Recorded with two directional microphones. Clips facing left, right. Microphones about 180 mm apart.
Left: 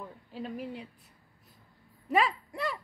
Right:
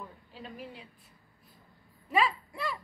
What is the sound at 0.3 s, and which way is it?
Speech, 45° left (ahead or behind).